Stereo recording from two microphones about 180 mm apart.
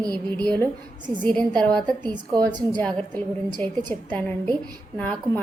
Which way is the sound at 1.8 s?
25° right (ahead or behind).